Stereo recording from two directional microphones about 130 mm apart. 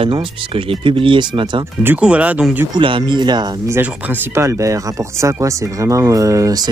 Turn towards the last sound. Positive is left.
turn(degrees=-25)  # may be behind; listen again after turning